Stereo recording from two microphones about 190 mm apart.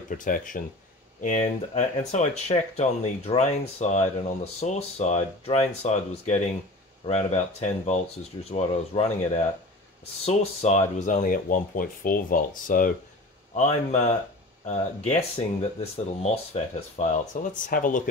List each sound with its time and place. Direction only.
0.1 s speech: 45° left (ahead or behind)
10.2 s speech: 35° left (ahead or behind)
13.6 s speech: 35° left (ahead or behind)